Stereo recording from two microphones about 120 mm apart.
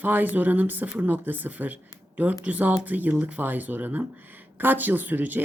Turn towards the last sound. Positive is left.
turn(degrees=-15)  # may be behind; listen again after turning